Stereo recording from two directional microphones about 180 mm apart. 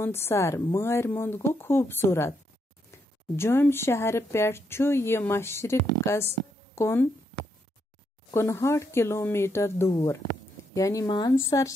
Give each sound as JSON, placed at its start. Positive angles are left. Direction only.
{"t": 0.0, "sound": "speech", "side_deg": 15}
{"t": 8.3, "sound": "speech", "side_deg": 15}